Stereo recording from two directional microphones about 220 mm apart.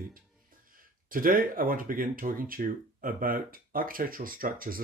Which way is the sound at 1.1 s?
40° right (ahead or behind).